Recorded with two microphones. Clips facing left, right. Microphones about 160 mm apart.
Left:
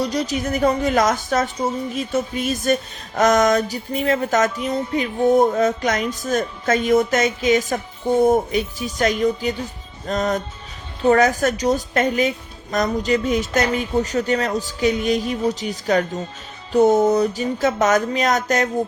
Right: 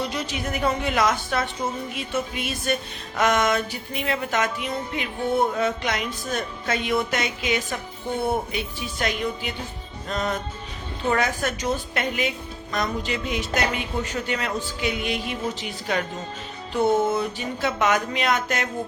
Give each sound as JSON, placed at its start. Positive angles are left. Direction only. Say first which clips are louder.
{"t": 0.0, "sound": "music", "louder": "left 6 dB", "side_deg": 40}